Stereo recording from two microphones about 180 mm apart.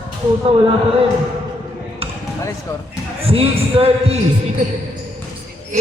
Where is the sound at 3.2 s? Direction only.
30° right (ahead or behind).